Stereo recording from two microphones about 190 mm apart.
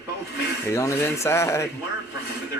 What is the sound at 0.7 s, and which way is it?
Speech, 15° left (ahead or behind).